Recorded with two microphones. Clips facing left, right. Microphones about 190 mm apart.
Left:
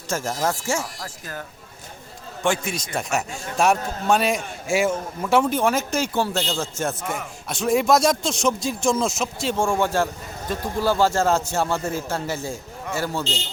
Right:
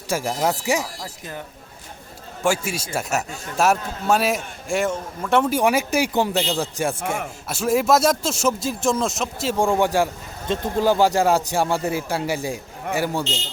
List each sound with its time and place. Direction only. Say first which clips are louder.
0.1 s a man's voice: right 2 dB; 15° right (ahead or behind)
2.4 s a man's voice: right 1 dB; 10° right (ahead or behind)
5.5 s a man's voice: right 2 dB; 10° right (ahead or behind)
7.0 s speech: right 3 dB; 50° right (ahead or behind)
7.4 s a man's voice: even; 5° right (ahead or behind)
9.6 s a man's voice: right 3 dB; 15° right (ahead or behind)